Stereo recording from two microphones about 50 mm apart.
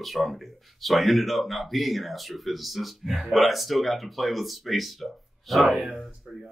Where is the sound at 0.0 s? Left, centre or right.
Centre.